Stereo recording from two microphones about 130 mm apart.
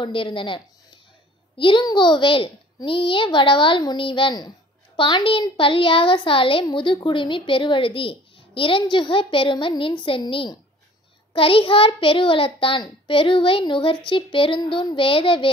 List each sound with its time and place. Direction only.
0.0 s a woman's voice: 40° left (ahead or behind)
1.6 s a woman's voice: 40° left (ahead or behind)